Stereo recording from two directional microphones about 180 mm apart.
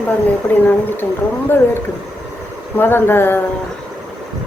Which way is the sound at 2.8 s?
10° left (ahead or behind).